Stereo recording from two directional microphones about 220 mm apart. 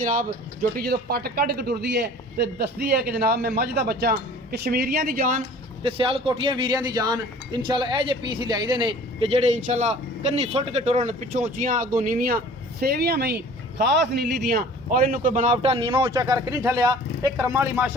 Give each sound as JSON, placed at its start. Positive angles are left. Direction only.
{"t": 0.0, "sound": "speech", "side_deg": -40}
{"t": 5.8, "sound": "a man's voice", "side_deg": -25}
{"t": 14.5, "sound": "a man's voice", "side_deg": -40}